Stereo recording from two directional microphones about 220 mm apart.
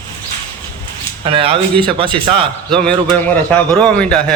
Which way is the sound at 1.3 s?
25° right (ahead or behind).